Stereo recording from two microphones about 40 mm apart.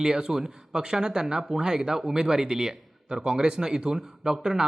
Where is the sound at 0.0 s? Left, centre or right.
Centre.